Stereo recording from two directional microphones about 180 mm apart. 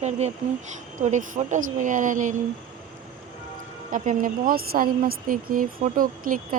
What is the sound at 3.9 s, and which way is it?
Speech, 50° right (ahead or behind).